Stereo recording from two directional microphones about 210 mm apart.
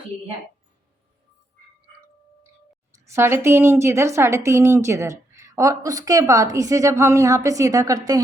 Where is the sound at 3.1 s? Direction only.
10° right (ahead or behind).